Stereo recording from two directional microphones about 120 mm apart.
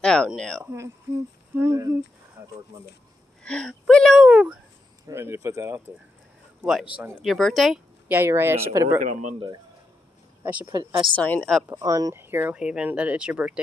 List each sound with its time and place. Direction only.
0.0 s speech: 5° left (ahead or behind)
0.7 s speech: 20° right (ahead or behind)
2.4 s a sound: 20° right (ahead or behind)
3.4 s speech: 5° left (ahead or behind); by 4.6 s 10° right (ahead or behind)
5.0 s speech: 25° right (ahead or behind)
6.6 s speech: 5° right (ahead or behind)
7.0 s speech: 15° right (ahead or behind)
7.2 s speech: centre (ahead or behind)
8.1 s speech: 20° right (ahead or behind)
9.0 s a man's voice: 90° right
10.4 s speech: 15° right (ahead or behind)
10.7 s a woman's voice: 35° right (ahead or behind)
11.1 s speech: 15° left (ahead or behind)
11.8 s speech: 30° right (ahead or behind); by 13.6 s 10° right (ahead or behind)